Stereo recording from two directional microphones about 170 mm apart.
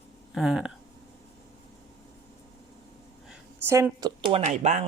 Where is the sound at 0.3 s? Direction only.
5° right (ahead or behind).